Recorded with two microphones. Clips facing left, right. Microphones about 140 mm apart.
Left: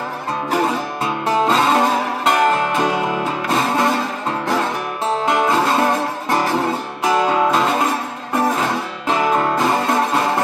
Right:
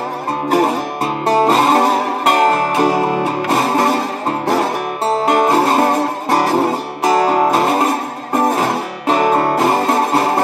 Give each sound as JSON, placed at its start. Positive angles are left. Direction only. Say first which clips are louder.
{"t": 1.2, "sound": "music", "louder": "right 4 dB", "side_deg": -35}